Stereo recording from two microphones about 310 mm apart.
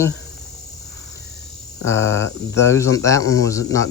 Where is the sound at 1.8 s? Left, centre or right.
Centre.